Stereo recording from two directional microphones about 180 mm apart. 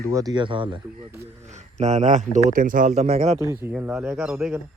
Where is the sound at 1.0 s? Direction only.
15° right (ahead or behind).